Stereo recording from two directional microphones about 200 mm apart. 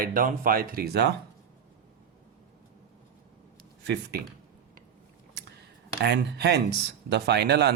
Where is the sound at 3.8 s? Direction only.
55° right (ahead or behind).